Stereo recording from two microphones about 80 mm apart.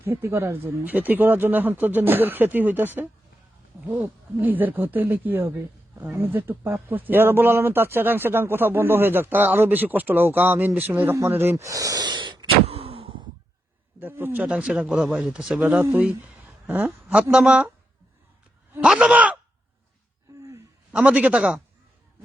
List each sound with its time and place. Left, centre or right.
0.0 s speech: right
14.0 s speech: right
14.4 s speech: centre
15.6 s speech: right
18.8 s speech: centre
20.4 s a sound: right
20.9 s speech: centre